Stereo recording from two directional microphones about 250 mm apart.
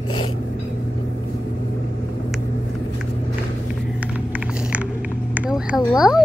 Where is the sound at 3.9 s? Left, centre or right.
Centre.